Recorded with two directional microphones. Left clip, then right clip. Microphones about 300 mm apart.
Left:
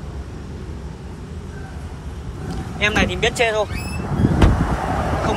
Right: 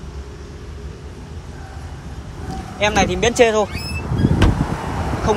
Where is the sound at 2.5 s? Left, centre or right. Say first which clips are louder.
Right 2 dB; centre.